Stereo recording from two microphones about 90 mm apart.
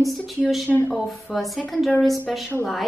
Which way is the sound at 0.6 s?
20° left (ahead or behind).